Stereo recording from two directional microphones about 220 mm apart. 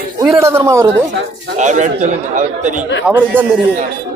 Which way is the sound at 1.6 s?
35° right (ahead or behind).